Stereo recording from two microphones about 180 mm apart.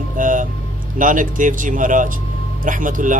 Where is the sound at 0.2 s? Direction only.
45° right (ahead or behind).